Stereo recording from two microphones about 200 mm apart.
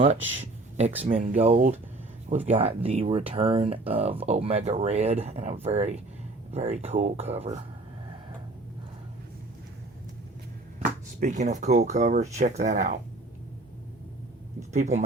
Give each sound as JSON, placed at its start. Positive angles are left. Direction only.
{"t": 0.3, "sound": "speech", "side_deg": -35}
{"t": 11.2, "sound": "speech", "side_deg": -35}
{"t": 14.7, "sound": "speech", "side_deg": -35}